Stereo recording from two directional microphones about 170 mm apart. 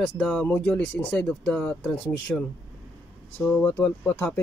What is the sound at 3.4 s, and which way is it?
Speech, 10° left (ahead or behind).